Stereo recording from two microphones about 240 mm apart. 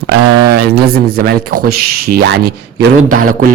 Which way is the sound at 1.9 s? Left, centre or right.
Right.